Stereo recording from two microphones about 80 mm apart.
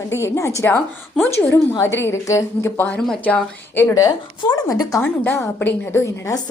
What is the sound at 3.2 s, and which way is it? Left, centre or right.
Speech, centre.